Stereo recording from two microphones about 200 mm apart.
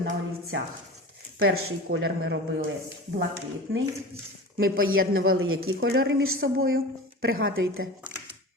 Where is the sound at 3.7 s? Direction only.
50° right (ahead or behind).